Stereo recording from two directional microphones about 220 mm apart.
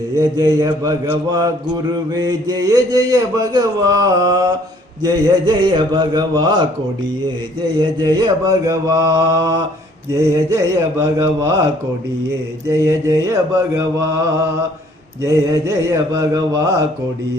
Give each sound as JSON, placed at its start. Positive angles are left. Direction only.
{"t": 0.2, "sound": "a man's voice", "side_deg": -15}
{"t": 7.8, "sound": "a man's voice", "side_deg": -20}
{"t": 12.6, "sound": "a man's voice", "side_deg": -15}